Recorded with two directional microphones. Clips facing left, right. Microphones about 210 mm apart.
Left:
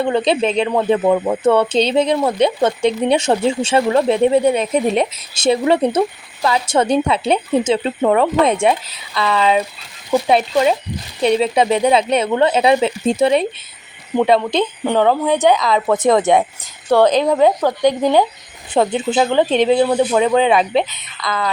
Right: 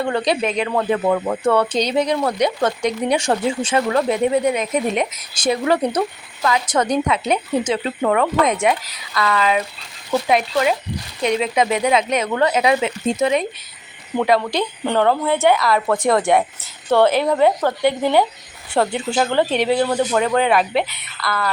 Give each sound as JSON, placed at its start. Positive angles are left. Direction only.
{"t": 0.0, "sound": "speech", "side_deg": 20}
{"t": 11.2, "sound": "speech", "side_deg": 30}
{"t": 14.8, "sound": "speech", "side_deg": 10}